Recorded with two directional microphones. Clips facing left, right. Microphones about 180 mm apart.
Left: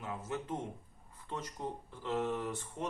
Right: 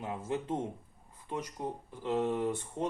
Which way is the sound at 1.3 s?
15° right (ahead or behind).